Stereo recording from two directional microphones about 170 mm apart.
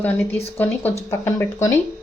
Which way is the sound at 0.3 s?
10° left (ahead or behind).